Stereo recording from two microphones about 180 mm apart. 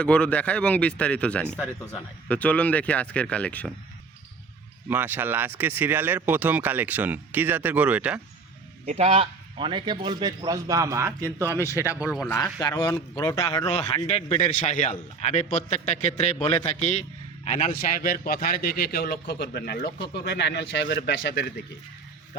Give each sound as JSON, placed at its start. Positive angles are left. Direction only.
{"t": 0.0, "sound": "speech", "side_deg": 5}
{"t": 4.9, "sound": "speech", "side_deg": -10}
{"t": 8.9, "sound": "a man's voice", "side_deg": -35}
{"t": 12.3, "sound": "speech", "side_deg": 20}
{"t": 13.7, "sound": "a man's voice", "side_deg": 35}